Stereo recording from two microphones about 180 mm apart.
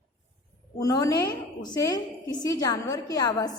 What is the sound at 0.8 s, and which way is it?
A woman's voice, 20° left (ahead or behind).